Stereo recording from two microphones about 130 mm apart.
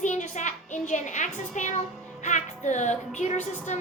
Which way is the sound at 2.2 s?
65° left (ahead or behind).